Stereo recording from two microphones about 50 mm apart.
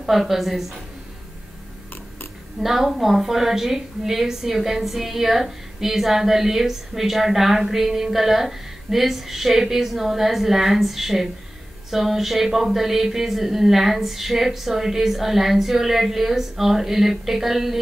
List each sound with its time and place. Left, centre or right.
0.0 s speech: centre
2.6 s speech: centre